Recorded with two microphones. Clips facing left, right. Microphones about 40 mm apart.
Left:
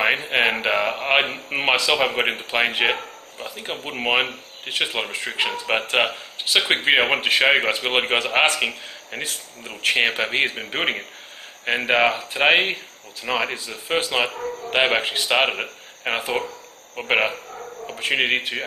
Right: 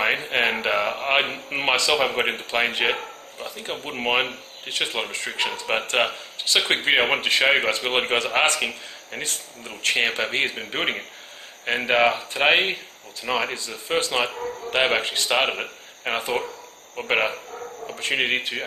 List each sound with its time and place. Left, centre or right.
0.3 s speech: centre